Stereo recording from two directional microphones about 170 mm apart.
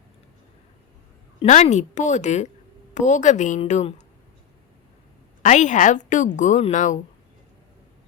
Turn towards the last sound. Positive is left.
turn(degrees=45)  # may be behind; listen again after turning